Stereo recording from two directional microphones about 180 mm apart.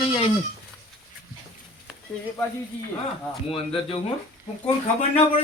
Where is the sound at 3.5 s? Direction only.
30° left (ahead or behind).